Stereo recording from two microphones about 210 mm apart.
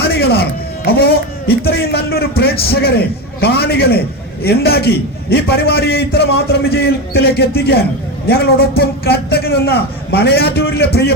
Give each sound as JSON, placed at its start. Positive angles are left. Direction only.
{"t": 0.0, "sound": "music", "side_deg": 50}
{"t": 0.9, "sound": "a man's voice", "side_deg": 50}